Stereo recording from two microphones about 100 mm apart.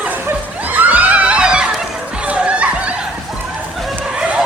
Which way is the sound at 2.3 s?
15° right (ahead or behind).